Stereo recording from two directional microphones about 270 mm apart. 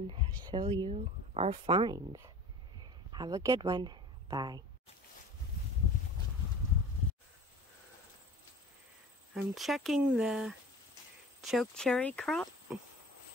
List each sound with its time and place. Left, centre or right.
0.1 s a woman's voice: centre
9.3 s speech: centre